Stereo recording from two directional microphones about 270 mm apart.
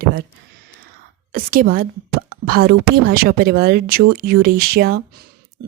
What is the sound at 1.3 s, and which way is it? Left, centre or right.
A woman's voice, right.